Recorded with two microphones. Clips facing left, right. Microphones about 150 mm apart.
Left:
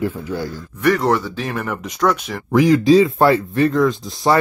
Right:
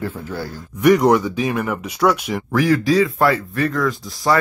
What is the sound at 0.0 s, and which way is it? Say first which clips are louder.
Speech: left 4 dB; 15° left (ahead or behind).